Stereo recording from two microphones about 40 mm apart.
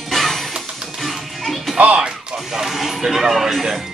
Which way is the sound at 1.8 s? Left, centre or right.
Right.